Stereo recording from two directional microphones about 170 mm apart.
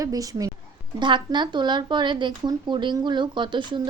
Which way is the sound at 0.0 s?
20° right (ahead or behind).